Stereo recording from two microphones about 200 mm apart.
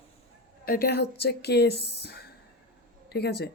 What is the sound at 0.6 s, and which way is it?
Speech, 45° left (ahead or behind).